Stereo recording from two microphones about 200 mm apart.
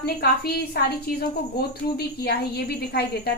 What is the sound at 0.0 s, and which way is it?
A woman's voice, 50° left (ahead or behind).